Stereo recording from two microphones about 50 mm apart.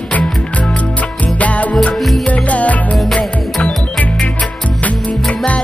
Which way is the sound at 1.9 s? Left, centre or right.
Centre.